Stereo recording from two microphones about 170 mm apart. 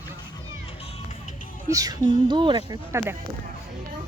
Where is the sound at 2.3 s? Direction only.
25° right (ahead or behind).